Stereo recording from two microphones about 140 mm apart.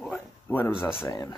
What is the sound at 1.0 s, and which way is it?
Speech, 25° left (ahead or behind).